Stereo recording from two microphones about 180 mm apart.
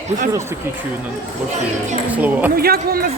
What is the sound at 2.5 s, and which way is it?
Speech, 55° right (ahead or behind).